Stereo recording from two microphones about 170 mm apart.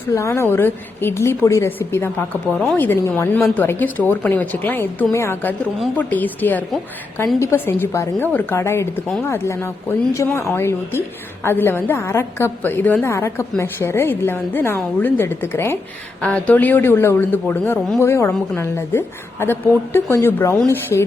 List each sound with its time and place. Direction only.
0.1 s a woman's voice: 15° left (ahead or behind)